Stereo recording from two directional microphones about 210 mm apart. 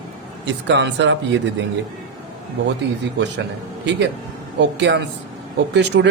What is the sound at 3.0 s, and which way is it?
Speech, 55° right (ahead or behind).